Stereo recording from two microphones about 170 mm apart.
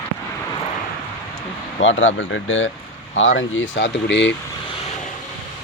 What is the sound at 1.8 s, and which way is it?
Speech, 90° left.